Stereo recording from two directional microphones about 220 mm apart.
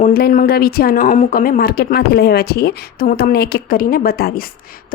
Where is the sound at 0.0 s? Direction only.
45° left (ahead or behind).